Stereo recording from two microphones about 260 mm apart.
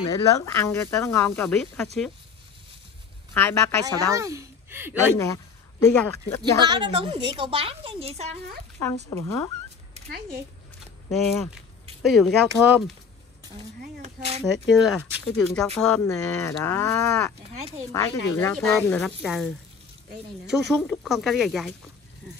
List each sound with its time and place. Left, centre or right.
0.5 s speech: centre
3.3 s speech: centre
3.8 s a woman's voice: centre
5.1 s speech: centre
6.6 s speech: centre
8.8 s speech: centre
11.1 s speech: centre
12.5 s speech: centre
13.7 s speech: right
14.4 s speech: centre
17.4 s speech: right
17.9 s speech: centre
20.5 s speech: centre